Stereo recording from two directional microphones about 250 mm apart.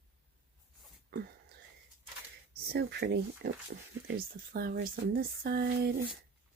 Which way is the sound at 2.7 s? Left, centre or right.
Right.